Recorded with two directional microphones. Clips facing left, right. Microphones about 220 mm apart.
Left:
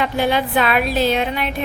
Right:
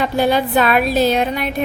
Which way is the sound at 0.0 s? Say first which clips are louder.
Right 3 dB; 40° right (ahead or behind).